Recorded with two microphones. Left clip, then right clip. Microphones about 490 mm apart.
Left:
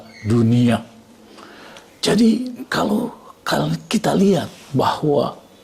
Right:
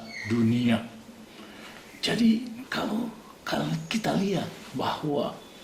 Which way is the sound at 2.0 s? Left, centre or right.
Left.